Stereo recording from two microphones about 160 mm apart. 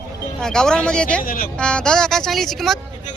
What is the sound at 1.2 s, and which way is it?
Speech, 65° left (ahead or behind).